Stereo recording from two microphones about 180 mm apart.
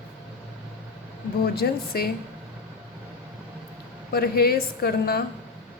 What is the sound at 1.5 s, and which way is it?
Speech, 60° left (ahead or behind).